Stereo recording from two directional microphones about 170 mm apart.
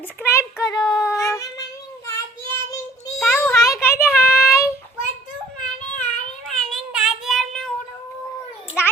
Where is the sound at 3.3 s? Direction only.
15° left (ahead or behind).